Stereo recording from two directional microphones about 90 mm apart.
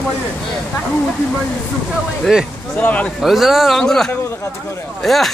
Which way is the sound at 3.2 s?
Centre (ahead or behind).